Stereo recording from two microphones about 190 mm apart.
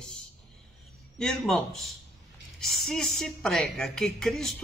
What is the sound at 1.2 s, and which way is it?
Speech, centre (ahead or behind).